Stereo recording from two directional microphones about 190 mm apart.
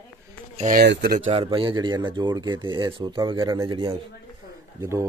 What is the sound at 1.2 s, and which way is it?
Speech, 30° right (ahead or behind).